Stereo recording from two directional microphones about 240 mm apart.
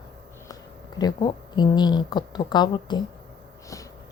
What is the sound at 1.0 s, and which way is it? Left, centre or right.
A woman's voice, centre.